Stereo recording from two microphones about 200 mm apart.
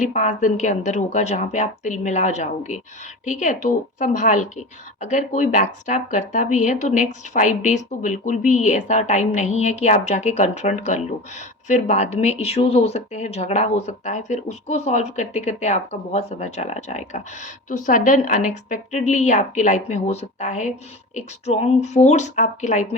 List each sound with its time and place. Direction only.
0.0 s a woman's voice: 40° left (ahead or behind)